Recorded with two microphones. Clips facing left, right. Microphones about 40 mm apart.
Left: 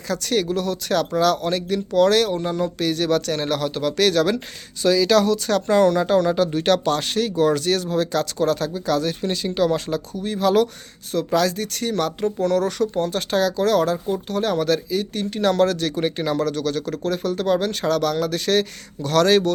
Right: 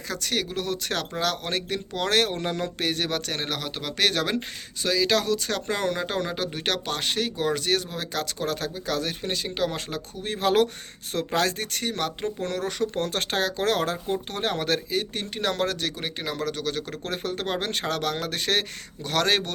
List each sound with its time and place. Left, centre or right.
0.1 s speech: centre
0.6 s speech: right
2.1 s speech: right
2.7 s speech: right; by 5.6 s centre
5.6 s speech: right
10.2 s speech: right
11.8 s speech: right
12.9 s speech: right
15.3 s speech: centre
16.0 s speech: centre; by 17.0 s right
17.0 s speech: right